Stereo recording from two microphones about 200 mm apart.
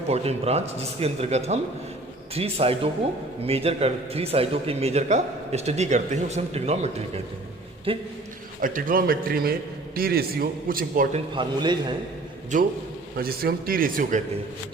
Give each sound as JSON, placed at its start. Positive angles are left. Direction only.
{"t": 0.1, "sound": "a man's voice", "side_deg": -30}
{"t": 8.6, "sound": "a man's voice", "side_deg": -45}
{"t": 11.3, "sound": "speech", "side_deg": -20}
{"t": 12.5, "sound": "a man's voice", "side_deg": -40}